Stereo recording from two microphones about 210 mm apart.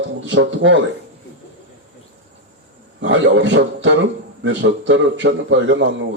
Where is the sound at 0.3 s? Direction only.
60° right (ahead or behind).